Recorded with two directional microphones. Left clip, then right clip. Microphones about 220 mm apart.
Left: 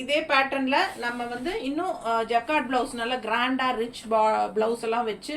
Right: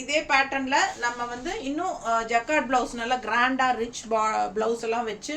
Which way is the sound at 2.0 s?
15° right (ahead or behind).